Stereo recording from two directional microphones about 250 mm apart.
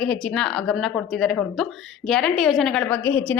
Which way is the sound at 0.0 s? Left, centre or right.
Centre.